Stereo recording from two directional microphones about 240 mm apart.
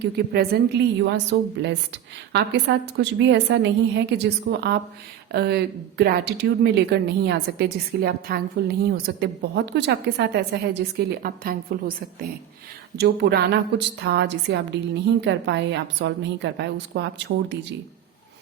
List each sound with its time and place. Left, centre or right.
0.0 s speech: right